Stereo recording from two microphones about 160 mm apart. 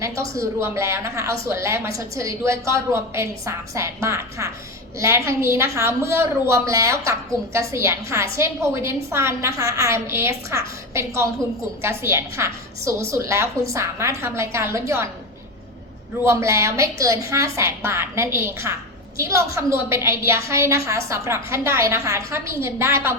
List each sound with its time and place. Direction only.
0.0 s a woman's voice: 20° right (ahead or behind)
16.2 s a woman's voice: 15° right (ahead or behind)